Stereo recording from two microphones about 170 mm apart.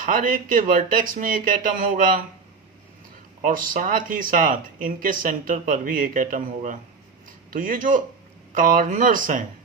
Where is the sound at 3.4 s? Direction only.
55° right (ahead or behind).